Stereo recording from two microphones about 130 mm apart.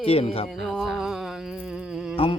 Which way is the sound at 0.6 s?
Centre (ahead or behind).